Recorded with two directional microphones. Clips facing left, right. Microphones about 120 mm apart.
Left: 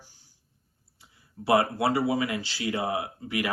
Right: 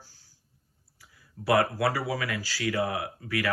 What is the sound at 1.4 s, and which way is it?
Speech, 25° left (ahead or behind).